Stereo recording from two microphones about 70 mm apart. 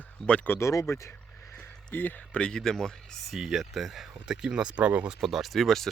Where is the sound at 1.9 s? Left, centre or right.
Left.